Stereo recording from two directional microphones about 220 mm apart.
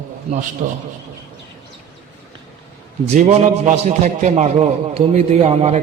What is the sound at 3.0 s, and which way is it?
A man's voice, 30° right (ahead or behind).